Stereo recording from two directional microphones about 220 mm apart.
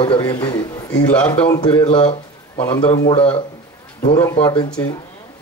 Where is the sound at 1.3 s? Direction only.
25° left (ahead or behind).